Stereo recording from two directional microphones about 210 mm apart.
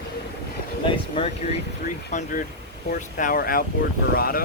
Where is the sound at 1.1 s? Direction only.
25° left (ahead or behind); by 4.4 s 45° left (ahead or behind).